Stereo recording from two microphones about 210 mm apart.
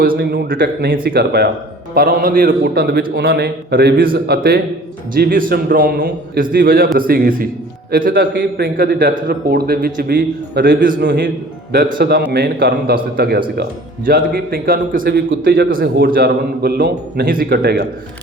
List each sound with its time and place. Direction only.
0.2 s a man's voice: 55° right (ahead or behind)